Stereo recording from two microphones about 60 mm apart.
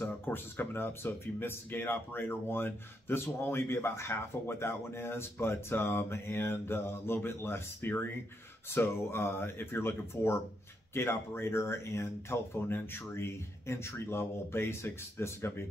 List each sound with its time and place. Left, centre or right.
0.0 s speech: left